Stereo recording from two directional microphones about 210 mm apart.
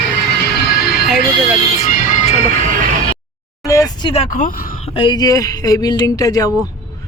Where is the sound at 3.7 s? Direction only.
15° left (ahead or behind).